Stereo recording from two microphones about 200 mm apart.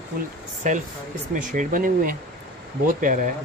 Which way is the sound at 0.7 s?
40° right (ahead or behind).